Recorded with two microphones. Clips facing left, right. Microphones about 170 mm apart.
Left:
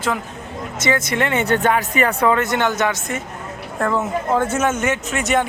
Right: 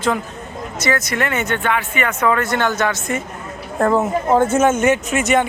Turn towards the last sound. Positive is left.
turn(degrees=0)  # may be behind; listen again after turning